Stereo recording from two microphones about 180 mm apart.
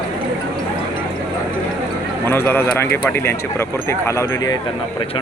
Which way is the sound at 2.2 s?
10° left (ahead or behind).